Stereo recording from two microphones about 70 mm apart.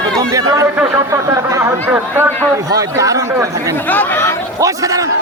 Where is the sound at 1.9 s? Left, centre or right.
Right.